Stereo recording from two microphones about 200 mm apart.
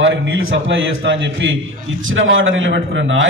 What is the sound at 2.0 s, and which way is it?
A man's voice, 75° right (ahead or behind).